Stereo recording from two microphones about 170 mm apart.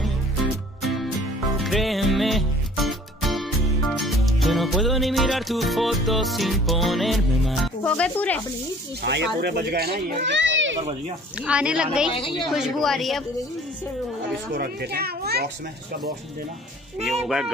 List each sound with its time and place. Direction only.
1.6 s music: centre (ahead or behind)
9.0 s speech: 85° right; by 10.1 s 60° right (ahead or behind)
10.2 s children playing: 90° right
11.4 s a woman's voice: 5° right (ahead or behind)
14.5 s speech: 65° right (ahead or behind)
17.0 s a woman's voice: centre (ahead or behind)